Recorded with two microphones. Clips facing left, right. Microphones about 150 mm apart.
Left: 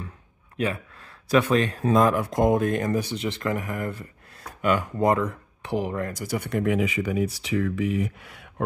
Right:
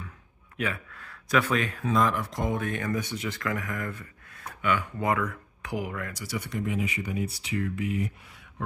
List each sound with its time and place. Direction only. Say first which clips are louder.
0.6 s speech: left 5 dB; 25° left (ahead or behind)
1.9 s speech: left 5 dB; 50° left (ahead or behind)
2.9 s speech: left 4 dB; 30° left (ahead or behind)
6.1 s speech: left 6 dB; 50° left (ahead or behind)
6.6 s speech: left 7 dB; 85° left
8.3 s a sound: left 7 dB; 65° left (ahead or behind)